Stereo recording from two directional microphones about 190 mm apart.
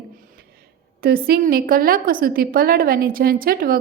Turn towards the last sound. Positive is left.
turn(degrees=-50)  # may be behind; listen again after turning